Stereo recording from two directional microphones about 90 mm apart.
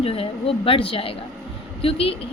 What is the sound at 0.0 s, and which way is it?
Speech, 90° left.